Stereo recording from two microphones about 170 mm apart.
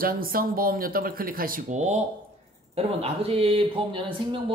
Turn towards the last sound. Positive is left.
turn(degrees=-30)  # may be behind; listen again after turning